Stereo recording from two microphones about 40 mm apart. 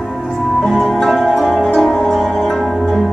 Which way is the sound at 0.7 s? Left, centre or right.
Centre.